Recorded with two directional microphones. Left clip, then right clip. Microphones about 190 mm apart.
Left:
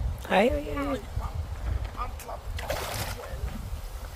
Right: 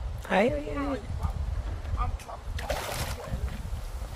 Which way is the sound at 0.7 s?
70° left (ahead or behind).